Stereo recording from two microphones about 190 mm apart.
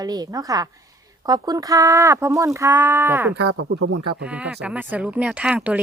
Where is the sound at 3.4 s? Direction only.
60° right (ahead or behind).